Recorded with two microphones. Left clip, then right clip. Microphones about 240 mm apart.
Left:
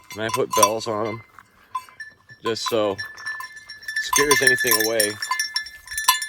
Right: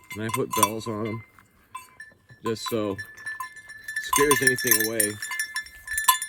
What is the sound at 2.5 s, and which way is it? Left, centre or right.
Speech, centre.